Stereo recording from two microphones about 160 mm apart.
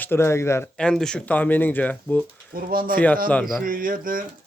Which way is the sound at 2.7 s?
65° right (ahead or behind).